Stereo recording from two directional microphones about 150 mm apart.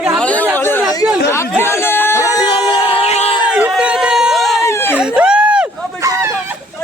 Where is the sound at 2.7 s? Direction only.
35° left (ahead or behind).